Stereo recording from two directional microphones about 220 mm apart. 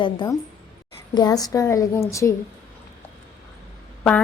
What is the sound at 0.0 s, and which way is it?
A woman's voice, 20° left (ahead or behind).